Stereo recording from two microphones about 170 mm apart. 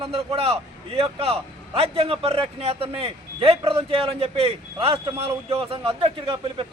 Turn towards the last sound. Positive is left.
turn(degrees=-30)  # may be behind; listen again after turning